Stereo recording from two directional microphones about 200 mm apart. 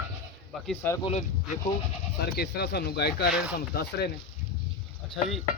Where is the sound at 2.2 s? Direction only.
55° left (ahead or behind).